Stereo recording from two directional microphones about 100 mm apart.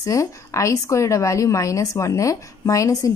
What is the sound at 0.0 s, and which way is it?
A woman's voice, 30° left (ahead or behind).